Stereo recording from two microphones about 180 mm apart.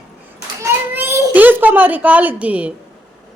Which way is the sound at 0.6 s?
15° right (ahead or behind).